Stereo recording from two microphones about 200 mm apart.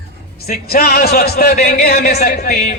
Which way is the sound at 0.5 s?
50° left (ahead or behind).